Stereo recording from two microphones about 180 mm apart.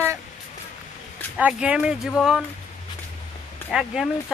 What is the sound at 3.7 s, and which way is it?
Speech, centre (ahead or behind).